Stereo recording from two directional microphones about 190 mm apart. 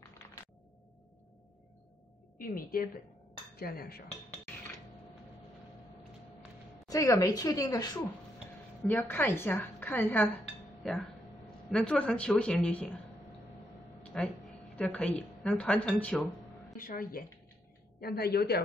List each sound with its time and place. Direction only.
2.3 s a woman's voice: 50° left (ahead or behind)
6.9 s a woman's voice: 15° left (ahead or behind)
14.0 s a sound: 5° left (ahead or behind)
14.8 s a woman's voice: 5° left (ahead or behind)
16.7 s a woman's voice: 50° left (ahead or behind)